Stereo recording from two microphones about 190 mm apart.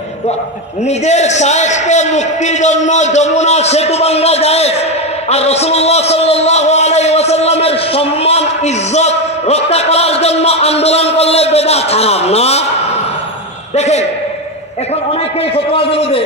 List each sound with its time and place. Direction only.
0.8 s a man's voice: 35° left (ahead or behind)
5.3 s a sound: 35° left (ahead or behind)
13.7 s a man's voice: 35° left (ahead or behind)
15.5 s a man's voice: 30° left (ahead or behind)